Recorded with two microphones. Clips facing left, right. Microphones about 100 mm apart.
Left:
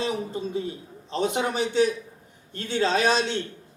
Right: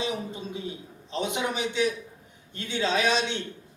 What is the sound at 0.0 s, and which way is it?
A man's voice, 40° left (ahead or behind).